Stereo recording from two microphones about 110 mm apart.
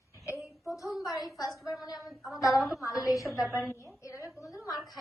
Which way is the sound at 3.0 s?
30° left (ahead or behind).